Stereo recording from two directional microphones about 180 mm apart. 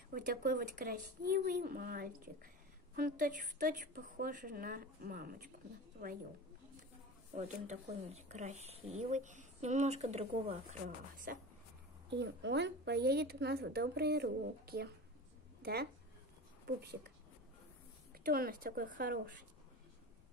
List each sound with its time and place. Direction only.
0.1 s a woman's voice: 55° right (ahead or behind)
7.3 s speech: 40° right (ahead or behind)
12.1 s a woman's voice: 75° right (ahead or behind)
18.2 s a woman's voice: 55° right (ahead or behind)